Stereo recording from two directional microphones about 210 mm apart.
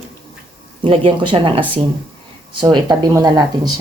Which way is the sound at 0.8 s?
25° right (ahead or behind).